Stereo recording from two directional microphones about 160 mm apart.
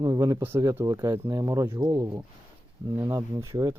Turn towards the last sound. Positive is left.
turn(degrees=-20)  # may be behind; listen again after turning